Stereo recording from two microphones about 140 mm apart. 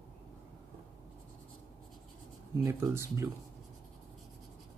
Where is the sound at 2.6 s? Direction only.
20° right (ahead or behind).